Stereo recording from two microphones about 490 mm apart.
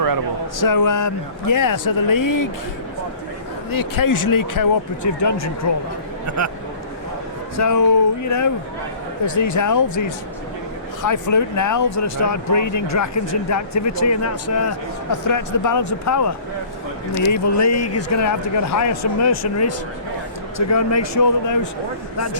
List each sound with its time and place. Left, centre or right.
0.6 s speech: left
3.7 s speech: left
6.2 s speech: right
7.5 s speech: left